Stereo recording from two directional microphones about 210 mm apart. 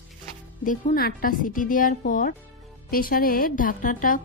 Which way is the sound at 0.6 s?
40° left (ahead or behind).